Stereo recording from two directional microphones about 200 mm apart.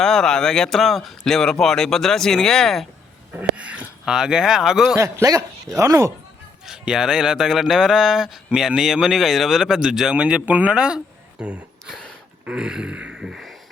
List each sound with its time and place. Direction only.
0.0 s speech: centre (ahead or behind)
4.9 s speech: 15° right (ahead or behind)
6.7 s speech: 5° right (ahead or behind)